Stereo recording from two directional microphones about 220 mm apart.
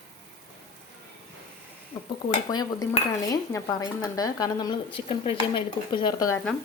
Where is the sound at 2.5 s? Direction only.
20° left (ahead or behind).